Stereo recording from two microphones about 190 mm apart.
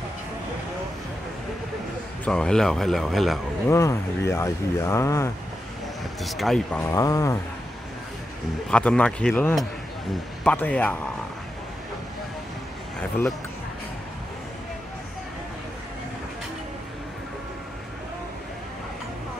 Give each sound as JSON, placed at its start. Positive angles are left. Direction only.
{"t": 2.2, "sound": "speech", "side_deg": 5}
{"t": 3.6, "sound": "speech", "side_deg": 15}
{"t": 6.2, "sound": "speech", "side_deg": 0}
{"t": 6.8, "sound": "speech", "side_deg": 20}
{"t": 8.6, "sound": "speech", "side_deg": 5}